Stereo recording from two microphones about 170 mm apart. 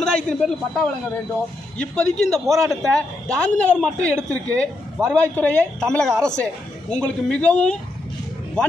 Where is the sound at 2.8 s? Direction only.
5° left (ahead or behind).